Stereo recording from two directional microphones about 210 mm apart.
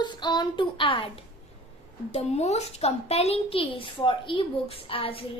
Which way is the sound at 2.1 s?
30° left (ahead or behind).